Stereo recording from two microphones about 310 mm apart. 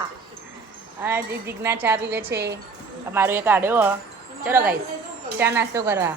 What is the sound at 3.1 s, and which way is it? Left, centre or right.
Speech, centre.